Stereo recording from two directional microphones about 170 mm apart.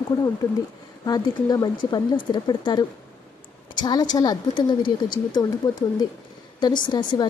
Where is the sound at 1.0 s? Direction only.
20° left (ahead or behind).